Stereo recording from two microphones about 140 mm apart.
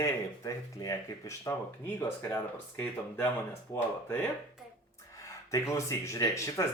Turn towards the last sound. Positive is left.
turn(degrees=20)  # may be behind; listen again after turning